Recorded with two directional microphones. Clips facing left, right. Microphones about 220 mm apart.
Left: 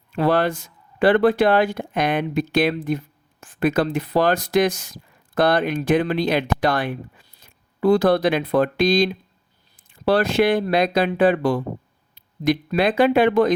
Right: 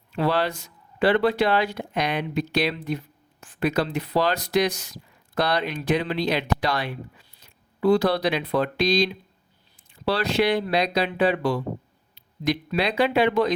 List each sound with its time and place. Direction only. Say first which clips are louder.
0.1 s speech: left 4 dB; 50° left (ahead or behind)